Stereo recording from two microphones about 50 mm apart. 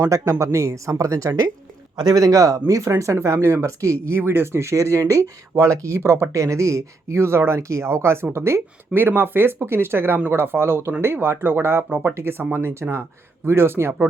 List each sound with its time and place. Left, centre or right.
0.0 s speech: right
2.6 s speech: right
4.2 s speech: right
4.6 s speech: right
8.9 s speech: right